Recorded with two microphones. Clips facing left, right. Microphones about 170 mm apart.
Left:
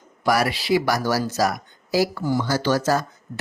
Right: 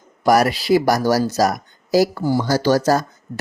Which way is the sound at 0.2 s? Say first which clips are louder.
Right 5 dB; 40° right (ahead or behind).